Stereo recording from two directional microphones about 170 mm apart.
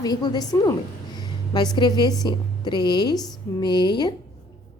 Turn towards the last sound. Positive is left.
turn(degrees=25)  # may be behind; listen again after turning